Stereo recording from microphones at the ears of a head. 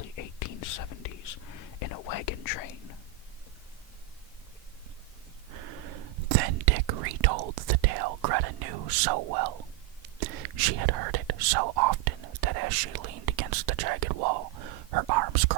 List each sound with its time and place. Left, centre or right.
0.0 s whispering: left
5.5 s whispering: right